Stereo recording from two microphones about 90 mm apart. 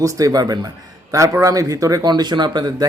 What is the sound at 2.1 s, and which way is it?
Speech, 55° right (ahead or behind).